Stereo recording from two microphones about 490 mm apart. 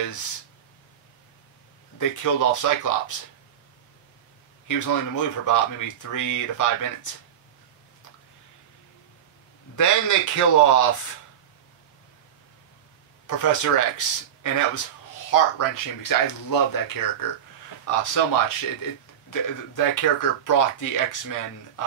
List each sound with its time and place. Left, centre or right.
2.0 s speech: left
4.6 s speech: left
9.8 s speech: left
13.3 s speech: left